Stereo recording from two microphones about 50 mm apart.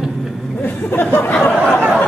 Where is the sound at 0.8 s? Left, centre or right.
Left.